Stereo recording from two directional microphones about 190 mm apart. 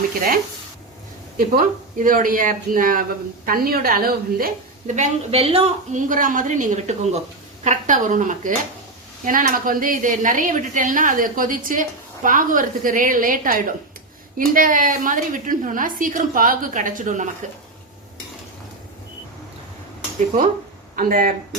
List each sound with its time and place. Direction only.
1.4 s speech: 45° right (ahead or behind)
20.9 s speech: 50° right (ahead or behind)